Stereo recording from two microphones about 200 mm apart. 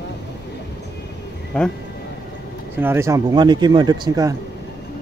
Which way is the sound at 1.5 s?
5° left (ahead or behind).